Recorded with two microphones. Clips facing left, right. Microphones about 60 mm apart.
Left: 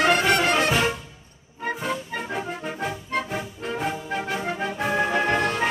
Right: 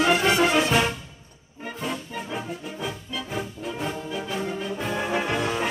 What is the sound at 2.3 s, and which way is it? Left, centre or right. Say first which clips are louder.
Music: left 2 dB; left.